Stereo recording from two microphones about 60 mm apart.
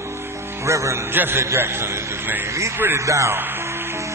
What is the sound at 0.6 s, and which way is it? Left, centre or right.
Speech, right.